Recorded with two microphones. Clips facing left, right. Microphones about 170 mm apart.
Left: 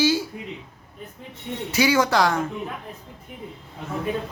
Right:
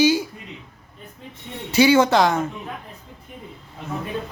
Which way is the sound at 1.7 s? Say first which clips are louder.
Right 5 dB; 25° right (ahead or behind).